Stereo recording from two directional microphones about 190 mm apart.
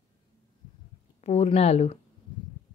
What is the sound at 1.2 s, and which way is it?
Speech, 35° left (ahead or behind).